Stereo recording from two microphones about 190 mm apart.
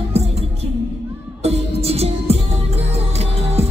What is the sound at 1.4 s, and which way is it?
Music, 30° right (ahead or behind).